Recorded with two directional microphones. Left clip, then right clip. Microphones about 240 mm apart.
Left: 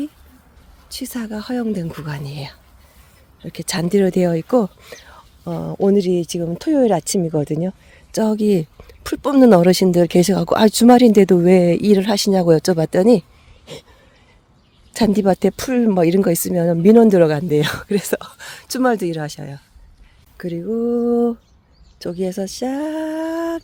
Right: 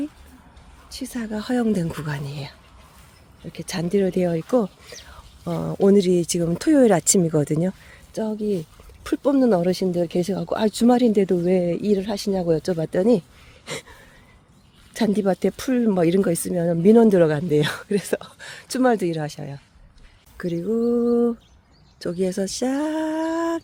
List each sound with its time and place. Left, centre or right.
0.9 s speech: centre
5.5 s speech: centre
8.1 s speech: left
13.7 s a sound: centre
14.9 s speech: centre